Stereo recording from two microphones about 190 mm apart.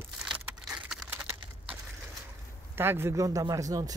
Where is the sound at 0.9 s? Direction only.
5° right (ahead or behind).